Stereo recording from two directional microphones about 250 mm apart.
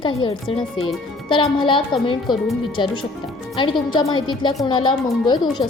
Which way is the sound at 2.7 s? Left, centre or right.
Centre.